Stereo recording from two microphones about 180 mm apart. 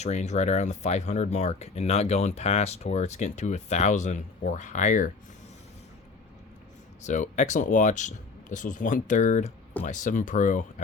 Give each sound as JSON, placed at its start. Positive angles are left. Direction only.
{"t": 0.0, "sound": "speech", "side_deg": 40}
{"t": 7.0, "sound": "speech", "side_deg": 40}